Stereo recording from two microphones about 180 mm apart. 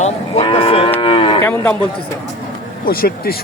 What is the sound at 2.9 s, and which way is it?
Speech, 55° left (ahead or behind).